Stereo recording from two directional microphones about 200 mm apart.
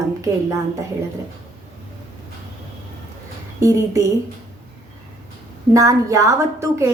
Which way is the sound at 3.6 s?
15° right (ahead or behind).